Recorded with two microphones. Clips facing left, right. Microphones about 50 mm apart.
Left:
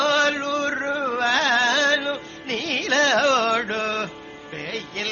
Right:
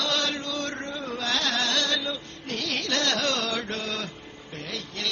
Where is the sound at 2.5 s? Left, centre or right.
Left.